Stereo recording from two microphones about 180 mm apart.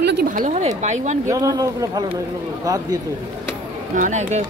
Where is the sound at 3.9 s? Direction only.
45° right (ahead or behind).